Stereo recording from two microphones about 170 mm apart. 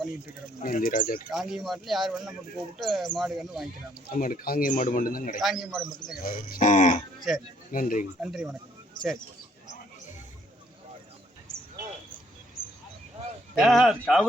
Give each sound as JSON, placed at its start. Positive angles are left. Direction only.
{"t": 0.6, "sound": "speech", "side_deg": 55}
{"t": 1.3, "sound": "speech", "side_deg": 0}
{"t": 4.1, "sound": "speech", "side_deg": 55}
{"t": 5.4, "sound": "speech", "side_deg": 0}
{"t": 6.2, "sound": "speech", "side_deg": 55}
{"t": 7.3, "sound": "speech", "side_deg": 0}
{"t": 7.7, "sound": "speech", "side_deg": 55}
{"t": 8.2, "sound": "speech", "side_deg": -5}
{"t": 13.6, "sound": "speech", "side_deg": 0}